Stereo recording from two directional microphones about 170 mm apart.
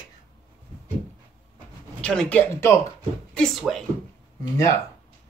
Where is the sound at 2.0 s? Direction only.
5° left (ahead or behind).